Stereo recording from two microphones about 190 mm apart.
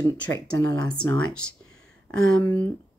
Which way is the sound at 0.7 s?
20° left (ahead or behind).